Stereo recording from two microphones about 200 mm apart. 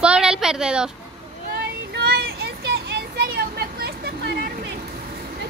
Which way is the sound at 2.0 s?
50° right (ahead or behind).